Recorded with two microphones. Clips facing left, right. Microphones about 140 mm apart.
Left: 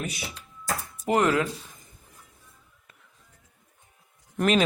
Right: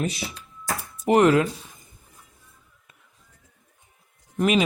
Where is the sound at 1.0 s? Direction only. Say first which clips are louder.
Right 5 dB; 25° right (ahead or behind).